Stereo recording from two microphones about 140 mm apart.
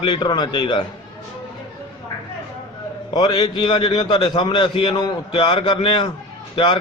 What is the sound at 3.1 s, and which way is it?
A man's voice, 30° left (ahead or behind).